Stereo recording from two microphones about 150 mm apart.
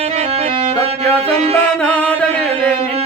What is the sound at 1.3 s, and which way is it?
Music, 40° right (ahead or behind).